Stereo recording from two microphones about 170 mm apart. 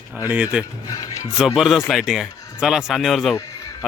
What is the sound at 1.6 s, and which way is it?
A man's voice, centre (ahead or behind).